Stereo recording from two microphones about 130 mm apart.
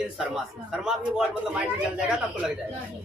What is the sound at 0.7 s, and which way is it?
A woman's voice, 5° right (ahead or behind).